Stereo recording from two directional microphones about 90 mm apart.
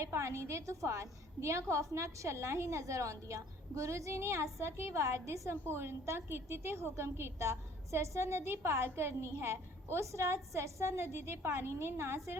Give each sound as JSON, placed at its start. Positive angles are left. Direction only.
{"t": 0.0, "sound": "a woman's voice", "side_deg": -30}